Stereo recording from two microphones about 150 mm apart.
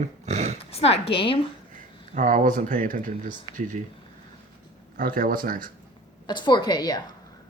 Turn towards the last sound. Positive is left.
turn(degrees=30)  # may be behind; listen again after turning